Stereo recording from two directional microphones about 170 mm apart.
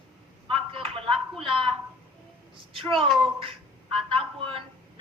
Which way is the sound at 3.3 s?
35° right (ahead or behind).